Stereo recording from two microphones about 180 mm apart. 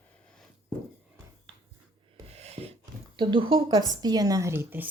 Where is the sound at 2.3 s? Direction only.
35° right (ahead or behind).